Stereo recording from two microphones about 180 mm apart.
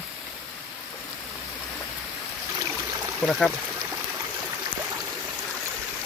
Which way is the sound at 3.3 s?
Centre (ahead or behind).